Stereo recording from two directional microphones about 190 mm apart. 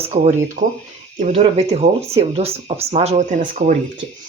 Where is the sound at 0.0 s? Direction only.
35° right (ahead or behind).